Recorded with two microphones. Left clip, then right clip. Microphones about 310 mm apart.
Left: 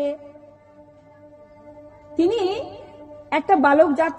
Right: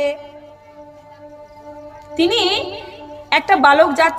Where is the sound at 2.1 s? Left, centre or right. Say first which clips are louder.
Right 5 dB; right.